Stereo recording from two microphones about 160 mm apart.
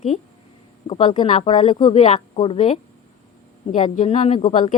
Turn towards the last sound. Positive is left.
turn(degrees=50)  # may be behind; listen again after turning